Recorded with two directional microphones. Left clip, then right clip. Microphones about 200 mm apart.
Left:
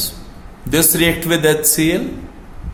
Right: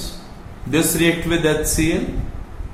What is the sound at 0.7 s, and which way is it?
Speech, 60° left (ahead or behind).